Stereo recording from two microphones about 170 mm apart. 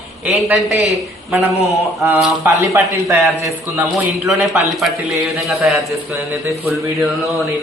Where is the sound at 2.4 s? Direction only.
20° right (ahead or behind).